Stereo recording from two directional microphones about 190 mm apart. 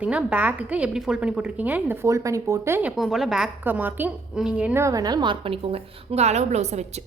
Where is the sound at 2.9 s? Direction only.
Centre (ahead or behind).